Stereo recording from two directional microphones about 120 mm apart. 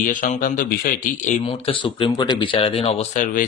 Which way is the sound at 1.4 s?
50° left (ahead or behind).